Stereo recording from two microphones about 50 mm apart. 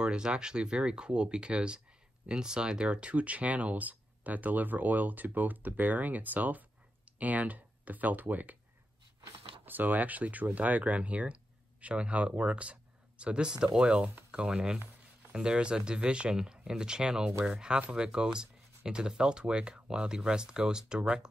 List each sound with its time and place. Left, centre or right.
0.0 s speech: centre; by 8.5 s right
9.7 s speech: right; by 21.0 s centre